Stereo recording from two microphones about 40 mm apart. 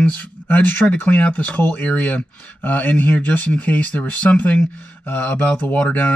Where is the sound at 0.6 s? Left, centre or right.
Left.